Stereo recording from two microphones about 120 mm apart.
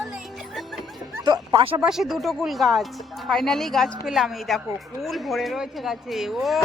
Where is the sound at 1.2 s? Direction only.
45° right (ahead or behind).